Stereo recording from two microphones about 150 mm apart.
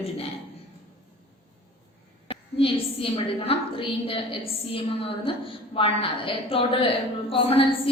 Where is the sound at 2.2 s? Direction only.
35° left (ahead or behind).